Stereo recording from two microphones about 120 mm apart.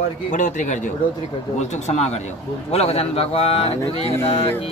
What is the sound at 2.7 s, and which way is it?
Speech, 60° left (ahead or behind).